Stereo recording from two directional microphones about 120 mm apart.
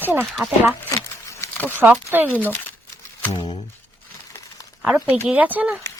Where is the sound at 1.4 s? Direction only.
25° left (ahead or behind).